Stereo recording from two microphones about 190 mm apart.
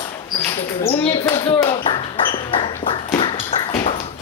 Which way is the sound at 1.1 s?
25° left (ahead or behind).